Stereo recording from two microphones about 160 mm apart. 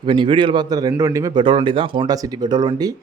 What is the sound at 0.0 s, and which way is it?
Speech, 30° right (ahead or behind).